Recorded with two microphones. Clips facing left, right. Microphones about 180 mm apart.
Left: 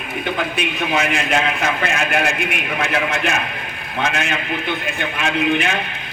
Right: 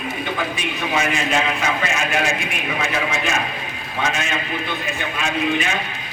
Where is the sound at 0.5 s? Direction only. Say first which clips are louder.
Left 2 dB; 65° left (ahead or behind).